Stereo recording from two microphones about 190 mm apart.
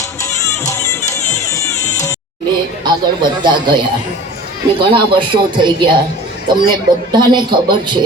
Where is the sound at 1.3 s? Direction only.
15° left (ahead or behind).